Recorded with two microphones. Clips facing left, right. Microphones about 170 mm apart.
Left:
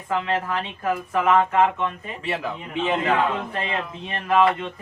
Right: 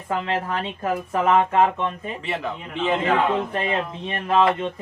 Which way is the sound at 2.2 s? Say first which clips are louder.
Left 2 dB; centre (ahead or behind).